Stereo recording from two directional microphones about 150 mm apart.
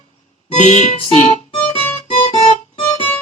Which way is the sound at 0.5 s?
50° left (ahead or behind).